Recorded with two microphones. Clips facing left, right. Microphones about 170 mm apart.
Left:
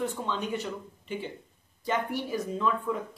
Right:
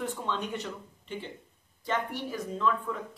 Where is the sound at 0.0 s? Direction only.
Centre (ahead or behind).